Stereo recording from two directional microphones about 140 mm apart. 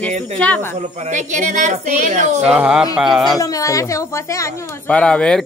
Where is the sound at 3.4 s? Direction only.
25° left (ahead or behind).